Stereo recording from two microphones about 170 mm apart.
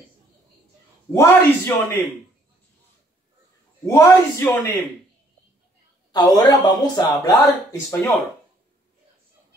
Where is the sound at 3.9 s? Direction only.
15° left (ahead or behind).